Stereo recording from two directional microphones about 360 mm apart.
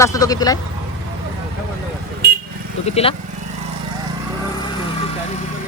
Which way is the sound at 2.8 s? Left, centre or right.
Centre.